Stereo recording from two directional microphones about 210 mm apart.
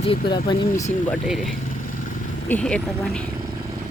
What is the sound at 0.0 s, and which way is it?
Speech, 25° left (ahead or behind).